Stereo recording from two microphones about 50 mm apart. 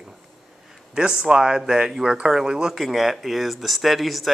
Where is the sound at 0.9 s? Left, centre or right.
Centre.